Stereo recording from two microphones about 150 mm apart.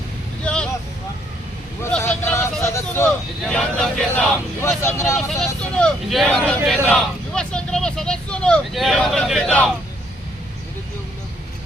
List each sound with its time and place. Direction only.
0.4 s vehicle: 5° left (ahead or behind)
1.9 s vehicle: 15° left (ahead or behind)
3.4 s speech: 5° left (ahead or behind)
4.8 s speech: 20° left (ahead or behind)
5.1 s speech: centre (ahead or behind)